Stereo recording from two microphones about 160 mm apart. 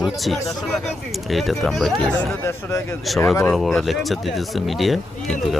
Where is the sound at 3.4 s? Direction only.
Centre (ahead or behind).